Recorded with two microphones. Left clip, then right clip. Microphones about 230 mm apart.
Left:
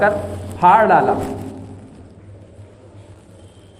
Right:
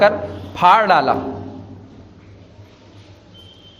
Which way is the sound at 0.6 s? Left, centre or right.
Right.